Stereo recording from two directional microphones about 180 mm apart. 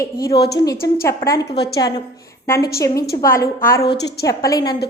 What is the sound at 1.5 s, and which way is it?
Speech, 65° left (ahead or behind).